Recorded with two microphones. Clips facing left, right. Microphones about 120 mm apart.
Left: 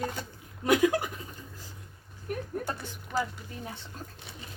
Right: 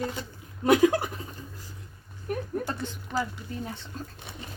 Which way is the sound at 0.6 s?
30° right (ahead or behind).